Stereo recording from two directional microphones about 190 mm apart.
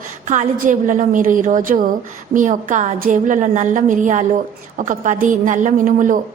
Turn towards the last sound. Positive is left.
turn(degrees=-45)  # may be behind; listen again after turning